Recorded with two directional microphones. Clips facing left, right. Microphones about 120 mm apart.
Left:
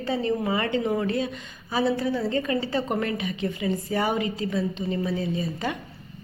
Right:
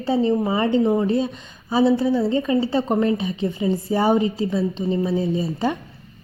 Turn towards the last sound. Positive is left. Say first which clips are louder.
# right 6 dB
turn(degrees=-30)  # may be behind; listen again after turning